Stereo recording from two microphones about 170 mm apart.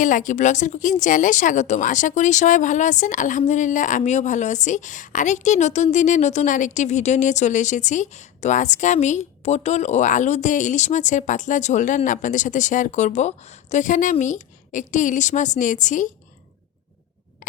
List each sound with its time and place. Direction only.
0.0 s speech: 50° left (ahead or behind)